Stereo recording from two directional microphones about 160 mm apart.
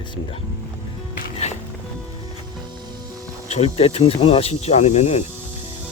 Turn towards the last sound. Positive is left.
turn(degrees=45)  # may be behind; listen again after turning